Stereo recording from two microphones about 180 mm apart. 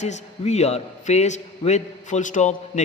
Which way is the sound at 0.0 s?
40° left (ahead or behind).